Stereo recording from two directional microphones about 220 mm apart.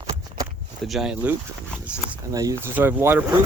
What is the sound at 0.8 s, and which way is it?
Speech, centre (ahead or behind).